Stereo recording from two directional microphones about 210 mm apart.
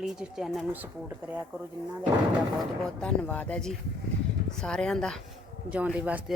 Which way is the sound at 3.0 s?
5° left (ahead or behind).